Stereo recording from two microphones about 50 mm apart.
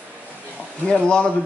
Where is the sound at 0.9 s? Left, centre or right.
Centre.